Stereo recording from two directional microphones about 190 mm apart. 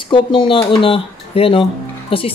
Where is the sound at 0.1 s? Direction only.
25° left (ahead or behind).